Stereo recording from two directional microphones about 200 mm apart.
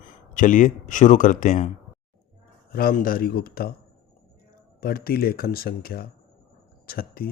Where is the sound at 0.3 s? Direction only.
40° left (ahead or behind).